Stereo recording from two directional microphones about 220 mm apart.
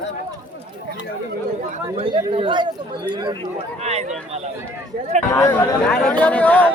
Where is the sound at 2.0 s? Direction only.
25° right (ahead or behind).